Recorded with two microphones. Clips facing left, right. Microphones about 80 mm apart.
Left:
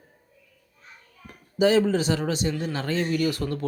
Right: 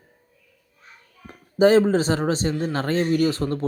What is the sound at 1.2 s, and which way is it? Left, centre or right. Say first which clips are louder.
A man's voice: right 5 dB; right.